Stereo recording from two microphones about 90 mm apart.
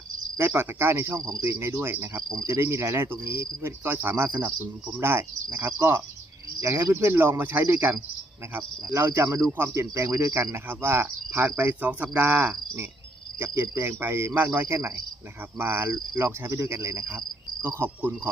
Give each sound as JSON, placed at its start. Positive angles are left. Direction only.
{"t": 0.3, "sound": "speech", "side_deg": -25}
{"t": 8.9, "sound": "cricket", "side_deg": -30}
{"t": 9.5, "sound": "speech", "side_deg": -30}
{"t": 11.5, "sound": "speech", "side_deg": -15}
{"t": 13.6, "sound": "speech", "side_deg": -30}
{"t": 16.1, "sound": "cricket", "side_deg": -25}
{"t": 17.8, "sound": "speech", "side_deg": -25}